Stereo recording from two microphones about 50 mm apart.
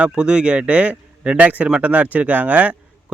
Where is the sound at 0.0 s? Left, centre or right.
Centre.